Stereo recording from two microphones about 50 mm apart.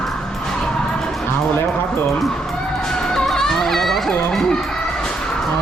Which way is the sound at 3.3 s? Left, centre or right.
Centre.